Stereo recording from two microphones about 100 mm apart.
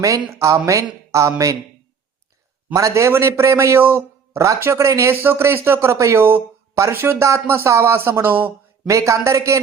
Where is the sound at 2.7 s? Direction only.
30° right (ahead or behind).